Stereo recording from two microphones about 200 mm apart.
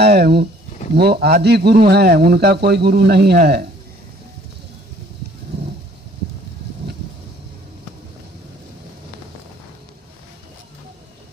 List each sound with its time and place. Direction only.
0.0 s speech: 55° right (ahead or behind)